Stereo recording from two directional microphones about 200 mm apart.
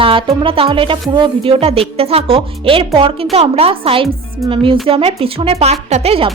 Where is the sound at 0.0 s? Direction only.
25° right (ahead or behind).